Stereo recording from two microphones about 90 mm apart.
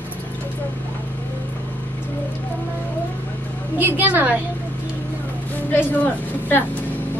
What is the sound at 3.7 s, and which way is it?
Speech, 20° right (ahead or behind).